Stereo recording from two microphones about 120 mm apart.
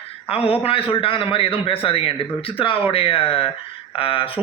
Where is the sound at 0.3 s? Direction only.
55° left (ahead or behind).